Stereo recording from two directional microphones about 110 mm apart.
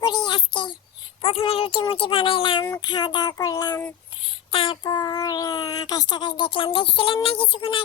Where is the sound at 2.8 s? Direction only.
40° left (ahead or behind).